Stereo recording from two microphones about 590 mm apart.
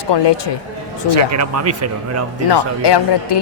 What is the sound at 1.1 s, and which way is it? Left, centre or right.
Speech, right.